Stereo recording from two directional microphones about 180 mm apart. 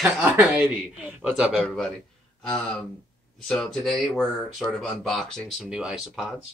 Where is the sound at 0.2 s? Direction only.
10° right (ahead or behind).